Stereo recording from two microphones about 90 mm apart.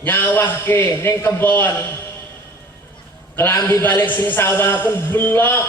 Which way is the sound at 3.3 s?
20° left (ahead or behind).